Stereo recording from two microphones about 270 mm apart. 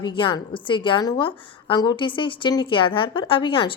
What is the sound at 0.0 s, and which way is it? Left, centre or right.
A woman's voice, centre.